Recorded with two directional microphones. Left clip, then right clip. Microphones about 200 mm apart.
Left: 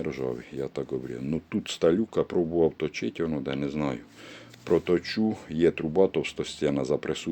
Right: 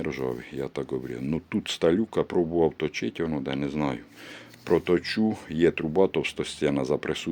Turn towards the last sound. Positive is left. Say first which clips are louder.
# right 1 dB
turn(degrees=-5)  # may be behind; listen again after turning